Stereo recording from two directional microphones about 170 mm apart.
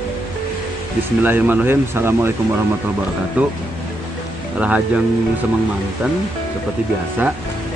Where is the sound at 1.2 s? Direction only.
10° right (ahead or behind).